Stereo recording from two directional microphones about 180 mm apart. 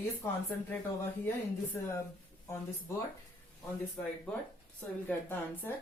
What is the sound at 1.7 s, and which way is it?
Speech, 10° left (ahead or behind).